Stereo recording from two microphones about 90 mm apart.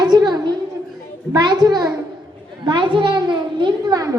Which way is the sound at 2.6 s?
60° right (ahead or behind).